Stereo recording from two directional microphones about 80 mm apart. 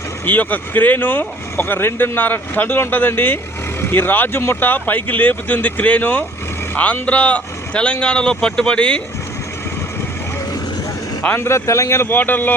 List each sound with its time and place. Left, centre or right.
0.3 s speech: left
11.3 s speech: left